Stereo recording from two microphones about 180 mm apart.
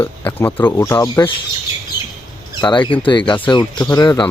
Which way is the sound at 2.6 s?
25° left (ahead or behind).